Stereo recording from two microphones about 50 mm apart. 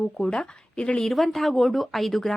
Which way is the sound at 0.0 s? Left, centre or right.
Centre.